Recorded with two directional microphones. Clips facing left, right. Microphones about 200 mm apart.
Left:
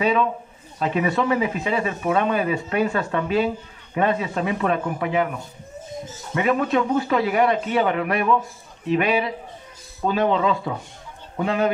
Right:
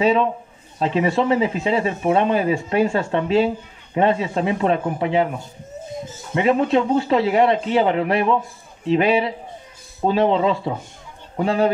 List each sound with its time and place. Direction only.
0.0 s speech: 25° right (ahead or behind)
6.3 s speech: 25° right (ahead or behind)